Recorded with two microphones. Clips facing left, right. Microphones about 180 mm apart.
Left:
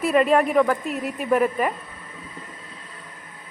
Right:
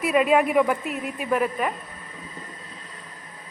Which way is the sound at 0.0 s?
5° right (ahead or behind).